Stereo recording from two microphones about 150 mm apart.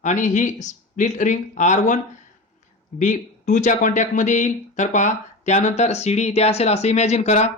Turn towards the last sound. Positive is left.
turn(degrees=50)  # may be behind; listen again after turning